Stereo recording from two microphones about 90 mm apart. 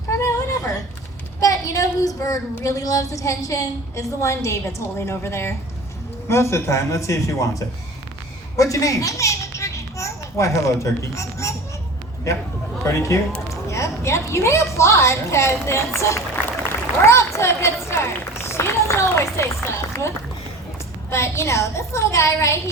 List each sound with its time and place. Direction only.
0.1 s a sound: 40° left (ahead or behind)
1.4 s a woman's voice: 40° left (ahead or behind)
12.8 s a woman's voice: 30° left (ahead or behind)
17.9 s run: 30° left (ahead or behind)
21.1 s a woman's voice: 30° left (ahead or behind)